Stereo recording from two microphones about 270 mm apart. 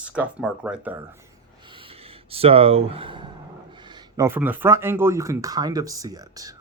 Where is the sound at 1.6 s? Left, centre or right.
Centre.